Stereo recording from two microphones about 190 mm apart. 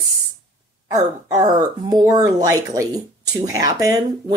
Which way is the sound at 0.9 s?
20° right (ahead or behind).